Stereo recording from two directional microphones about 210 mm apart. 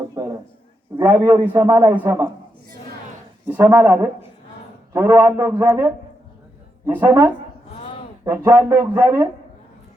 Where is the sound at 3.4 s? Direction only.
10° right (ahead or behind).